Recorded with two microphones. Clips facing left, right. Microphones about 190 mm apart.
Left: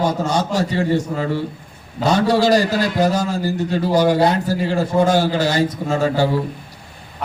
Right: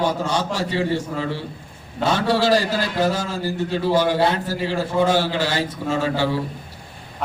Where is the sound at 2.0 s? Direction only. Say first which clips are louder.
Left 4 dB; 40° left (ahead or behind).